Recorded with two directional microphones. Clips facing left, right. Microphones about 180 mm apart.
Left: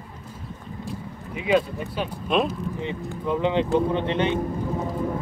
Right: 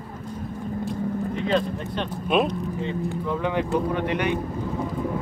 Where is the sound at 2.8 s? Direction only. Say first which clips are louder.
Right 3 dB; 20° left (ahead or behind).